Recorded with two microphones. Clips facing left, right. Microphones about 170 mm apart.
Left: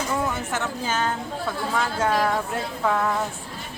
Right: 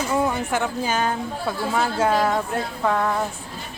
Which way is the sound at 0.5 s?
15° right (ahead or behind).